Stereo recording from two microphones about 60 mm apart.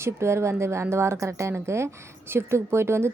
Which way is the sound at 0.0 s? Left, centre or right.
Right.